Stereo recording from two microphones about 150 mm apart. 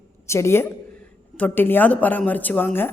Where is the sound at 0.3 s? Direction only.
15° left (ahead or behind).